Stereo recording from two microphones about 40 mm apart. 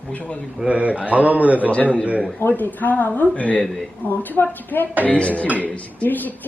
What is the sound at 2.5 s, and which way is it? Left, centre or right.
Speech, left.